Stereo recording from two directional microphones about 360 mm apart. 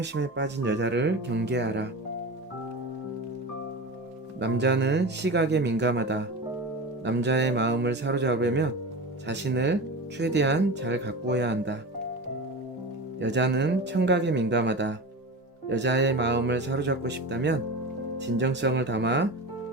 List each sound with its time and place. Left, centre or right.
0.0 s speech: right
4.4 s speech: right
13.1 s speech: right